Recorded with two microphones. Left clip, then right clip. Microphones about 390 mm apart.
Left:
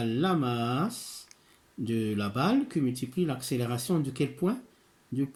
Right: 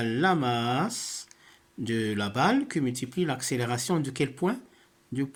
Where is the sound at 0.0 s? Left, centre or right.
Centre.